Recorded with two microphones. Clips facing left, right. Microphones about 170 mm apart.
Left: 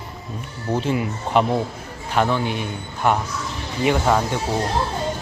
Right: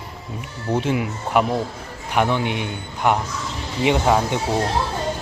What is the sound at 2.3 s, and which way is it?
A man's voice, 20° right (ahead or behind).